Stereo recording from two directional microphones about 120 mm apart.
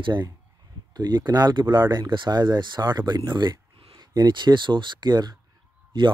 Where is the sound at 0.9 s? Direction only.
35° right (ahead or behind).